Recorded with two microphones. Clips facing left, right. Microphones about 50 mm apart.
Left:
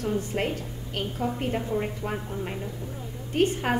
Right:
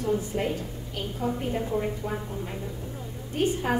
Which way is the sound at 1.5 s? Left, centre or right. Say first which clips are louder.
Even; left.